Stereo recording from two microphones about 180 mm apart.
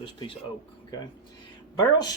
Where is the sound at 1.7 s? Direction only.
20° left (ahead or behind).